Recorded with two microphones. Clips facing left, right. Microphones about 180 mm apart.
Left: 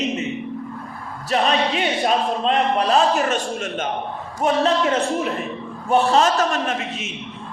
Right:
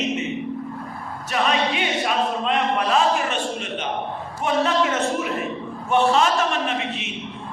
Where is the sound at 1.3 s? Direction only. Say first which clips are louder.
Left 2 dB; 35° left (ahead or behind).